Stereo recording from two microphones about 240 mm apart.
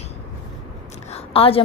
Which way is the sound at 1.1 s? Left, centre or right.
Left.